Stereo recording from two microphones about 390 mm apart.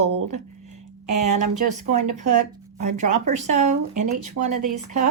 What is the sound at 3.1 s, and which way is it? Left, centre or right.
Speech, right.